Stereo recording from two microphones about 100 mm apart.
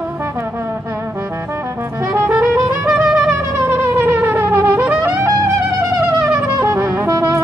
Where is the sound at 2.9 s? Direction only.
10° right (ahead or behind).